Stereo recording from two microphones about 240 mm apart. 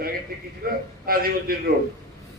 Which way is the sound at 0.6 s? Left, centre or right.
Right.